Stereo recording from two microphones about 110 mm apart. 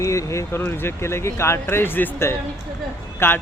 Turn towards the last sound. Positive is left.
turn(degrees=20)  # may be behind; listen again after turning